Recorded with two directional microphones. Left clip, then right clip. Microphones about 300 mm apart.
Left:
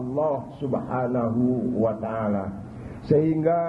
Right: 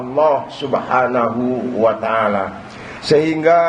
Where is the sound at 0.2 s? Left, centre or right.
Centre.